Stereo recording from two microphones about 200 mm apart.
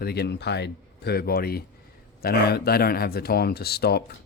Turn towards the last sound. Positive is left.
turn(degrees=55)  # may be behind; listen again after turning